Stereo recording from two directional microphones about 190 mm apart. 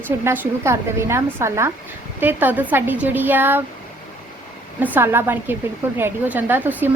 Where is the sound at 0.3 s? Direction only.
15° right (ahead or behind).